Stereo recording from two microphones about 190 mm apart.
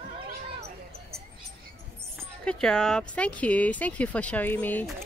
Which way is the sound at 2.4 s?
5° left (ahead or behind).